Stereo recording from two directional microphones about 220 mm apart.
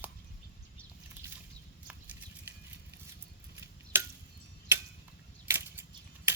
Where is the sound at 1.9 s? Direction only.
5° right (ahead or behind).